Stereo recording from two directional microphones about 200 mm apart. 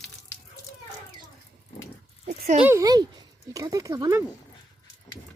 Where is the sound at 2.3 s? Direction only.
35° right (ahead or behind).